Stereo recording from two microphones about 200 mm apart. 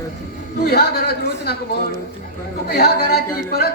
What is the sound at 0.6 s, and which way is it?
Speech, 50° left (ahead or behind).